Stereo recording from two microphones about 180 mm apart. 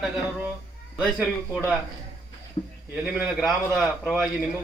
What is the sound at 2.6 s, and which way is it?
Speech, 30° left (ahead or behind).